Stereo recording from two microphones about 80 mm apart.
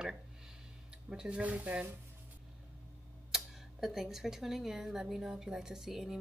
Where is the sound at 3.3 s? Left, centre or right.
Centre.